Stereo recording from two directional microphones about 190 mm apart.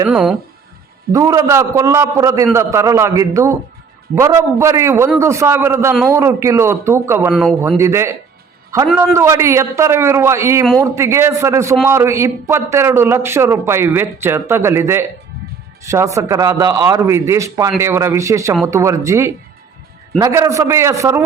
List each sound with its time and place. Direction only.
0.1 s speech: 5° right (ahead or behind)
1.1 s a man's voice: 15° right (ahead or behind); by 7.8 s centre (ahead or behind)
7.8 s a man's voice: 15° right (ahead or behind)